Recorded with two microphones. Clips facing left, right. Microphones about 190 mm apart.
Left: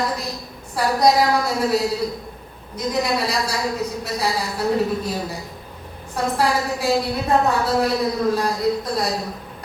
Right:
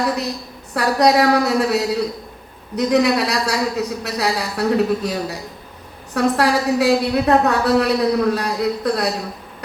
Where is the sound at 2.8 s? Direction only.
70° right (ahead or behind).